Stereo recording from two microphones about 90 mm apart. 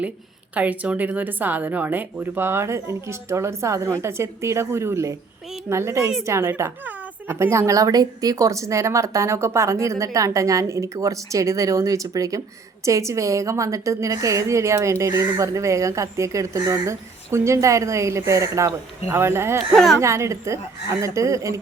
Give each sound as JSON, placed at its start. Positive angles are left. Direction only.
{"t": 0.5, "sound": "a woman's voice", "side_deg": -15}
{"t": 19.7, "sound": "speech", "side_deg": 0}
{"t": 20.0, "sound": "a woman's voice", "side_deg": -30}